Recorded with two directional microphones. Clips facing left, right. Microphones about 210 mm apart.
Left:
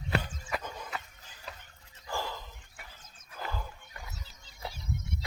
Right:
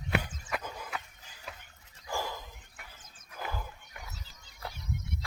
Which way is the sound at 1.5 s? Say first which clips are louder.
Even; centre (ahead or behind).